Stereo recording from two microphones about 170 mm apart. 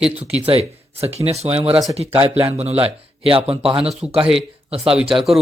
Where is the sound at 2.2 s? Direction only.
20° right (ahead or behind).